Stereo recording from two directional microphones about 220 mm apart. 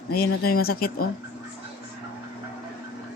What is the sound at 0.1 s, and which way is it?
Speech, 45° left (ahead or behind).